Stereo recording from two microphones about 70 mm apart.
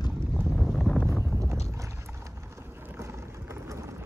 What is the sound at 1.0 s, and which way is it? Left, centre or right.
Clip-clop, centre.